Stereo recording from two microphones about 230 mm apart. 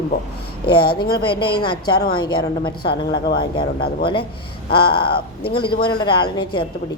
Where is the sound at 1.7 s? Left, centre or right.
Left.